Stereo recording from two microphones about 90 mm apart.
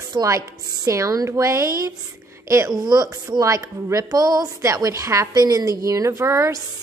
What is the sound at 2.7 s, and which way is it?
Speech, 50° right (ahead or behind).